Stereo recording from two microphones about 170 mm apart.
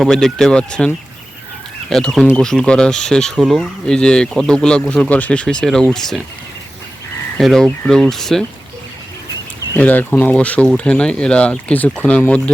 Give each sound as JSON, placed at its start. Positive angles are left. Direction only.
{"t": 0.0, "sound": "speech", "side_deg": 0}
{"t": 7.3, "sound": "speech", "side_deg": 0}
{"t": 9.7, "sound": "speech", "side_deg": 10}